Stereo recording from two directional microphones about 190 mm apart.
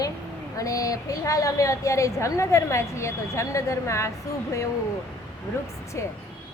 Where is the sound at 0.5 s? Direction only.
20° left (ahead or behind).